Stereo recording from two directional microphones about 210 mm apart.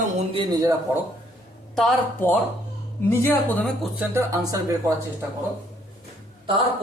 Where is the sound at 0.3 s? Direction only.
20° right (ahead or behind).